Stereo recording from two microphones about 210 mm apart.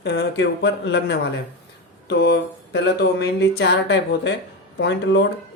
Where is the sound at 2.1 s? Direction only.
50° left (ahead or behind).